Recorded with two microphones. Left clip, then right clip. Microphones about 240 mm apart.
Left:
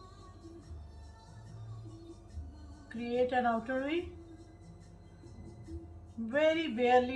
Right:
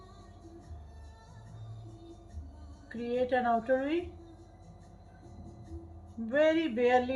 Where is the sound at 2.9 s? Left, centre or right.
Centre.